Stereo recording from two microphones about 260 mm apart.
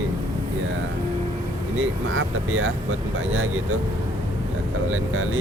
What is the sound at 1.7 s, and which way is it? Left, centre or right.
Speech, right.